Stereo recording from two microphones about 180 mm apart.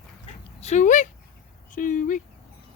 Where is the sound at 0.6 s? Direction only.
40° left (ahead or behind).